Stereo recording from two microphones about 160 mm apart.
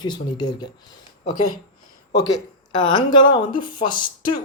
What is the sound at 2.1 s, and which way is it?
Speech, 25° left (ahead or behind).